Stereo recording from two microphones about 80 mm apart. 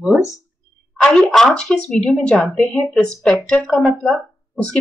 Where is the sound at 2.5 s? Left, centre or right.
Centre.